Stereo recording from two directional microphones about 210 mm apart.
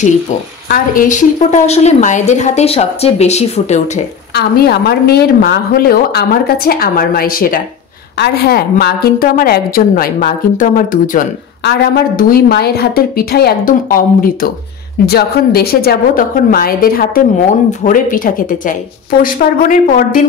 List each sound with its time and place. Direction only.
0.7 s a woman's voice: 40° left (ahead or behind)
4.3 s a woman's voice: 50° left (ahead or behind)